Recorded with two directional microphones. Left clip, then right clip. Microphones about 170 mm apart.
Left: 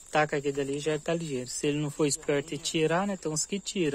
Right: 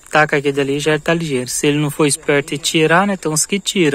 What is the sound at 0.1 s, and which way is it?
Speech, 5° right (ahead or behind).